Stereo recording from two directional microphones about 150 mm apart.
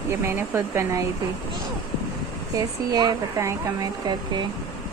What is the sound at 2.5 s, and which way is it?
Speech, 25° right (ahead or behind).